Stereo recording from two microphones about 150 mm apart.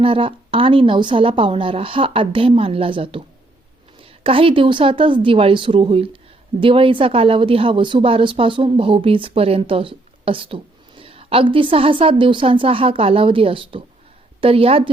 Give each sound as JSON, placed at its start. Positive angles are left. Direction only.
{"t": 0.0, "sound": "speech", "side_deg": -35}